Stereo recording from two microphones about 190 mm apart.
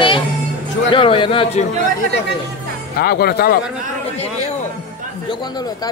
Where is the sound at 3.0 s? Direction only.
55° left (ahead or behind).